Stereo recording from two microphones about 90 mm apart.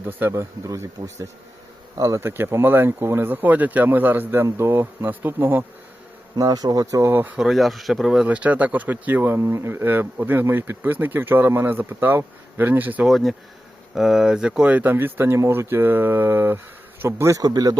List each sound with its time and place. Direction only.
0.0 s speech: 20° right (ahead or behind)
6.3 s speech: 45° right (ahead or behind)
7.1 s speech: 25° right (ahead or behind)
7.3 s speech: 5° right (ahead or behind)
13.1 s speech: centre (ahead or behind); by 17.4 s 35° right (ahead or behind)
17.4 s speech: 50° right (ahead or behind)